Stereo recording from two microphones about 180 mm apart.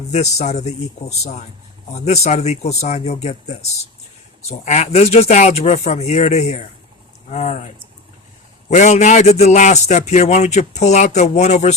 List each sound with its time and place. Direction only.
0.1 s speech: 40° left (ahead or behind)
8.7 s speech: 40° left (ahead or behind)